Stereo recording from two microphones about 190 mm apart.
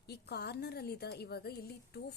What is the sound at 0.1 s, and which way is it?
A woman's voice, 60° left (ahead or behind).